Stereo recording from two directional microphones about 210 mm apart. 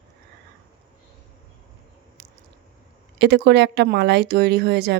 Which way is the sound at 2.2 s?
50° right (ahead or behind).